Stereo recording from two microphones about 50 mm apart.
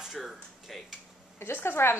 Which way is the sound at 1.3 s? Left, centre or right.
Left.